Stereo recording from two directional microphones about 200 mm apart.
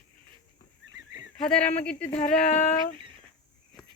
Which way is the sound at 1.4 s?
5° left (ahead or behind).